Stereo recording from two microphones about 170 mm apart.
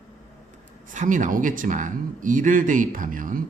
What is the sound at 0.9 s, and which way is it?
Speech, 50° right (ahead or behind).